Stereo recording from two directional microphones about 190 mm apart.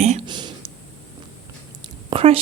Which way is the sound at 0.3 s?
25° right (ahead or behind).